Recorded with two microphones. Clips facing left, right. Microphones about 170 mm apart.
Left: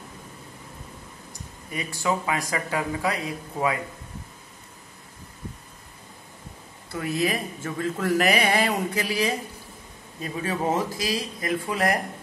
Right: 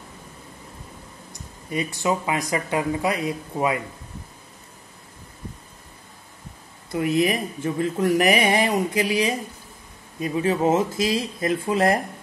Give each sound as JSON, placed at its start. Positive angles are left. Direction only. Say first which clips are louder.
{"t": 1.7, "sound": "speech", "louder": "right 3 dB", "side_deg": -20}
{"t": 6.9, "sound": "speech", "louder": "right 5 dB", "side_deg": -20}